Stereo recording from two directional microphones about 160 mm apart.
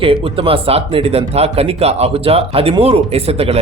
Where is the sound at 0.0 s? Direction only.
35° right (ahead or behind).